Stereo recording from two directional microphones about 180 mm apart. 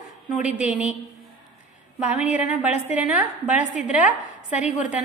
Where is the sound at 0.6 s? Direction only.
10° right (ahead or behind).